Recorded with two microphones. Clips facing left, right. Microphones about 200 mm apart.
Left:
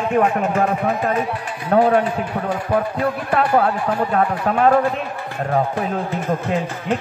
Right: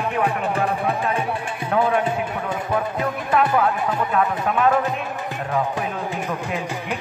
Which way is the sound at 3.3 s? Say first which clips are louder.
Left 1 dB; 40° left (ahead or behind).